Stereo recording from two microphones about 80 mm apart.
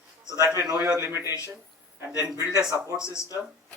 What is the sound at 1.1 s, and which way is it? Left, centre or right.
Speech, right.